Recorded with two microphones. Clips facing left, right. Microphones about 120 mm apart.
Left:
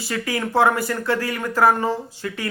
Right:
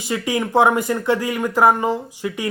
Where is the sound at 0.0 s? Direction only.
20° right (ahead or behind).